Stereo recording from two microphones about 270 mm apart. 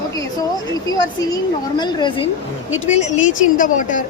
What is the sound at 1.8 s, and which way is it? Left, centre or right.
Speech, centre.